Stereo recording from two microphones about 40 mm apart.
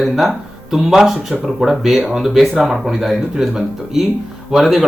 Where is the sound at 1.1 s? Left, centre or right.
Right.